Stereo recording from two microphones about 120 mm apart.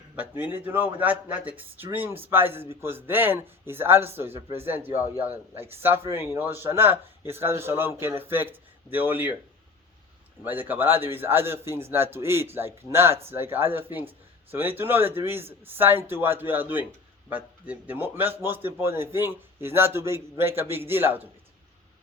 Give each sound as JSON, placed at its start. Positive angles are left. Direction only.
{"t": 0.2, "sound": "a man's voice", "side_deg": -15}
{"t": 10.4, "sound": "a man's voice", "side_deg": -15}